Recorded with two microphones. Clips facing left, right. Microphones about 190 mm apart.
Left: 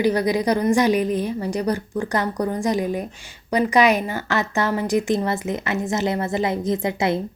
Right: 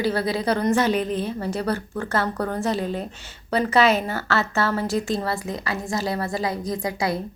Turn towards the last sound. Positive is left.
turn(degrees=25)  # may be behind; listen again after turning